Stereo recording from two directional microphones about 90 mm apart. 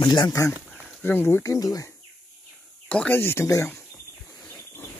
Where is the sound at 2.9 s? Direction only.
15° left (ahead or behind).